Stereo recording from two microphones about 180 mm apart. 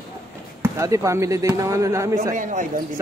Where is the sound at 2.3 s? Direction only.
45° right (ahead or behind).